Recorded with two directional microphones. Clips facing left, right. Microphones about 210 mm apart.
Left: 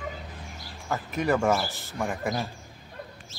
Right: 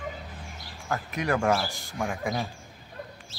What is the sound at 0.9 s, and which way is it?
Speech, centre (ahead or behind).